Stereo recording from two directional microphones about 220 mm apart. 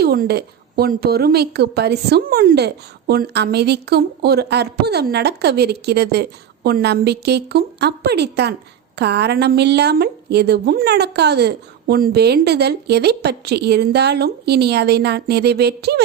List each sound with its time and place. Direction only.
0.0 s a woman's voice: 45° right (ahead or behind)